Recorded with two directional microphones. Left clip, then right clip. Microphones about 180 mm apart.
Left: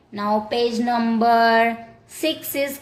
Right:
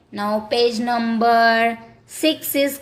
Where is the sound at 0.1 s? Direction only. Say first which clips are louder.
Even; 25° right (ahead or behind).